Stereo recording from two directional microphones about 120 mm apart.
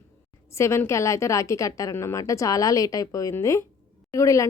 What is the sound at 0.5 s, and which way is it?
Speech, 25° left (ahead or behind).